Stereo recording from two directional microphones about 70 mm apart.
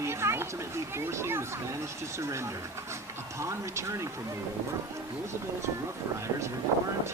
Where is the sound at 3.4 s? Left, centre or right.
Right.